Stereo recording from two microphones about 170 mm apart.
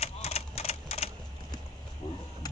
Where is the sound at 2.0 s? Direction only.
25° left (ahead or behind).